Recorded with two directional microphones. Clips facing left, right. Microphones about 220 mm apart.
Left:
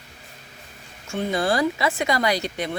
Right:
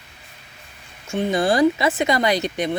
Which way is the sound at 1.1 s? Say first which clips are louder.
Right 3 dB; 20° right (ahead or behind).